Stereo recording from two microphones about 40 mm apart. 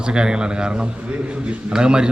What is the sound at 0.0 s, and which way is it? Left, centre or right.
A man's voice, right.